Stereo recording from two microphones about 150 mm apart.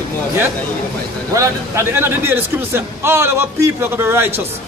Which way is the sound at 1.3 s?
20° right (ahead or behind).